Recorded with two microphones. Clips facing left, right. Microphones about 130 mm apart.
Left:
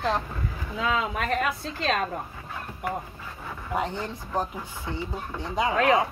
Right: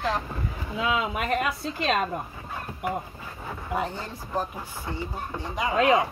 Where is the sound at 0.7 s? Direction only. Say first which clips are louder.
Even; 10° right (ahead or behind).